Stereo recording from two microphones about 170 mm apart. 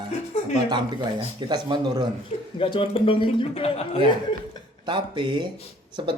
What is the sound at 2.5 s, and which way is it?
A man's voice, 30° left (ahead or behind).